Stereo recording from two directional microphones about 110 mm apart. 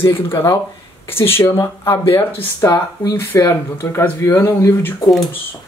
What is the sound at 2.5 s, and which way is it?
Speech, 30° left (ahead or behind).